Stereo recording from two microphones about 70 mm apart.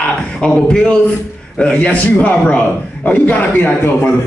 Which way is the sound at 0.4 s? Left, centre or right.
Centre.